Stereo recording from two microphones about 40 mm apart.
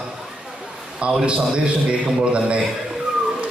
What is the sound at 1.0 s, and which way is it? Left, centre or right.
A man's voice, right.